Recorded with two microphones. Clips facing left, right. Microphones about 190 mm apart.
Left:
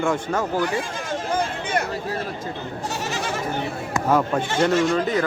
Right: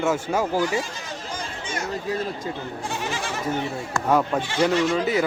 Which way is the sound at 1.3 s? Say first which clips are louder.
Left 8 dB; 60° left (ahead or behind).